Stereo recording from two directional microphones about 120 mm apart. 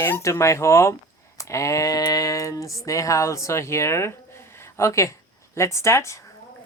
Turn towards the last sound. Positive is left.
turn(degrees=25)  # may be behind; listen again after turning